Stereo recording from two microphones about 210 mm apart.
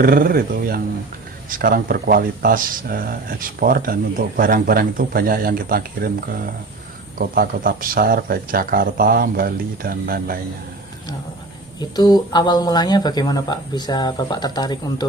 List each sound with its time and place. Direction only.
0.0 s speech: 45° right (ahead or behind)
11.8 s speech: 20° left (ahead or behind)